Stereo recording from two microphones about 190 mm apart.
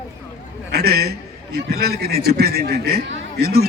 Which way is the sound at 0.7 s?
55° right (ahead or behind).